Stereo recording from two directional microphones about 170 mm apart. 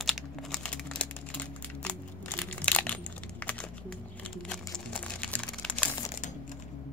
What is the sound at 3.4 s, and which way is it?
Music, 5° left (ahead or behind).